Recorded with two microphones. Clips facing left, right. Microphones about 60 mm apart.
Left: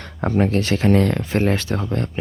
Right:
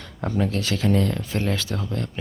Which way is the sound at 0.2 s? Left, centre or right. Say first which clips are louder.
Left 6 dB; left.